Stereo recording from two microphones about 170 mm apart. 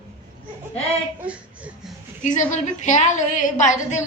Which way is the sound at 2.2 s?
45° left (ahead or behind).